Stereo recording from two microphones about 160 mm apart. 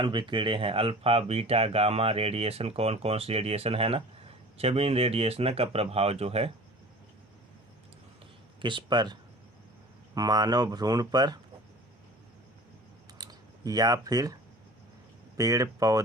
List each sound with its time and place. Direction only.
0.0 s speech: 30° right (ahead or behind)
8.6 s speech: 30° right (ahead or behind)
10.2 s speech: 25° right (ahead or behind)
13.2 s a sound: 25° right (ahead or behind)
13.7 s speech: 25° right (ahead or behind)
15.4 s speech: 20° right (ahead or behind)